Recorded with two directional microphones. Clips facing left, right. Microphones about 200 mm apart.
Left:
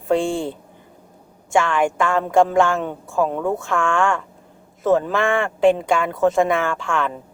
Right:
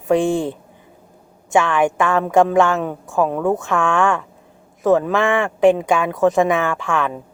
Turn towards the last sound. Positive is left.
turn(degrees=-20)  # may be behind; listen again after turning